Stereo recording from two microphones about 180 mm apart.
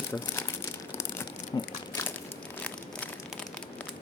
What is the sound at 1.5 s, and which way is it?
Crumpling, 20° left (ahead or behind).